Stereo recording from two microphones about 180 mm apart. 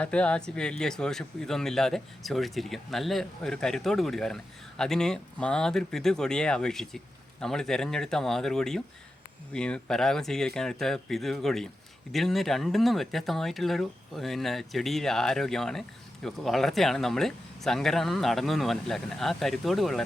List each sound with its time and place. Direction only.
0.0 s speech: 5° left (ahead or behind)